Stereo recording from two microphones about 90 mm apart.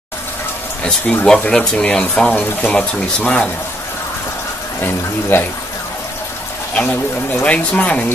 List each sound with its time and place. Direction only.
1.2 s speech: 10° left (ahead or behind)
5.3 s speech: 25° left (ahead or behind)
6.7 s speech: 15° left (ahead or behind)